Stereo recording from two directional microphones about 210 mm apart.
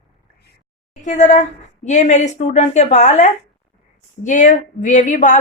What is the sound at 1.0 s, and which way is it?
Speech, 35° left (ahead or behind).